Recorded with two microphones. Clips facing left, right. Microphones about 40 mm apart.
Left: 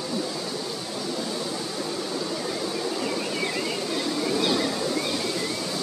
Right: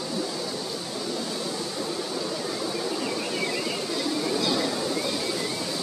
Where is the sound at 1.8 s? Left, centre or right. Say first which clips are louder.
Left 1 dB; centre.